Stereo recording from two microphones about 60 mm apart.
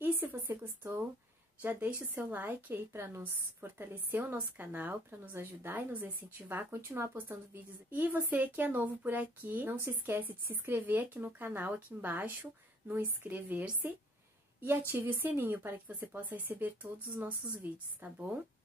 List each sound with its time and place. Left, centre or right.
0.0 s a sound: right
1.6 s a woman's voice: right
6.7 s speech: right
7.9 s a woman's voice: right